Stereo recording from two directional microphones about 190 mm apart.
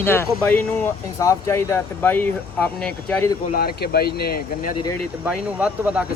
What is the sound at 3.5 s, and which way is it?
Speech, 55° left (ahead or behind).